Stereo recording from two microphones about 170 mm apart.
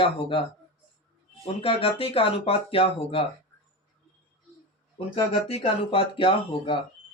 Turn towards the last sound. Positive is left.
turn(degrees=30)  # may be behind; listen again after turning